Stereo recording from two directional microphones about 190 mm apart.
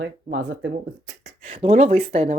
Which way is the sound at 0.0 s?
70° right (ahead or behind).